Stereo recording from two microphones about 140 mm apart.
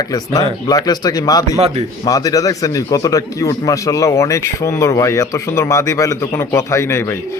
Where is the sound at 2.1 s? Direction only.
25° left (ahead or behind).